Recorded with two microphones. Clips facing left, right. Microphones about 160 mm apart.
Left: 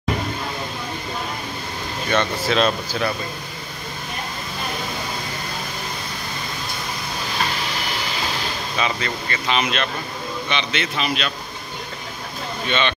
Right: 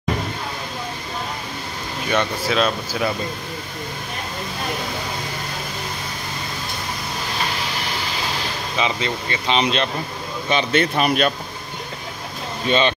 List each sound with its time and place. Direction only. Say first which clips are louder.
2.0 s speech: even; 10° right (ahead or behind)
8.7 s speech: right 2 dB; 20° right (ahead or behind)
10.5 s a man's voice: right 7 dB; 45° right (ahead or behind)
12.6 s speech: right 4 dB; 35° right (ahead or behind)